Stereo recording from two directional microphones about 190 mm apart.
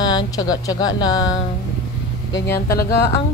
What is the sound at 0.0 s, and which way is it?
Speech, 20° left (ahead or behind).